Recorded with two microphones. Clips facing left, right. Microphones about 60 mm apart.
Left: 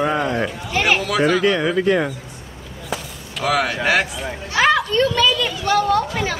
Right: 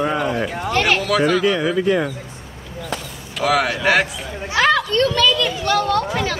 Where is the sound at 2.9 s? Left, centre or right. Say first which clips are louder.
Left 2 dB; centre.